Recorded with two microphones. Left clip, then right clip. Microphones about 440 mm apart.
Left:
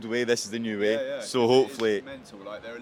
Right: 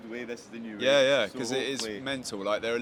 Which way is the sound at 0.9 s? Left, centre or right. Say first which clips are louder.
Right 7 dB; right.